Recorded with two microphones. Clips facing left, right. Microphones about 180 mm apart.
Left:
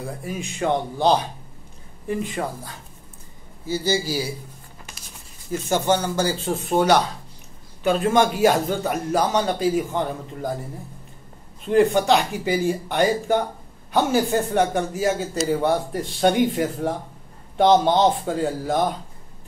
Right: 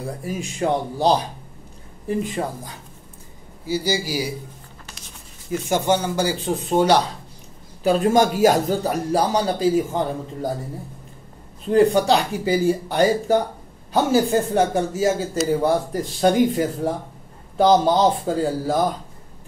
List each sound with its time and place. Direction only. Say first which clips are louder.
0.0 s speech: right 2 dB; 35° right (ahead or behind)
2.4 s speech: right 1 dB; 25° right (ahead or behind)
3.6 s speech: even; 10° right (ahead or behind)
5.7 s speech: right 1 dB; 15° right (ahead or behind)
7.8 s speech: right 2 dB; 35° right (ahead or behind)
11.7 s speech: right 1 dB; 35° right (ahead or behind)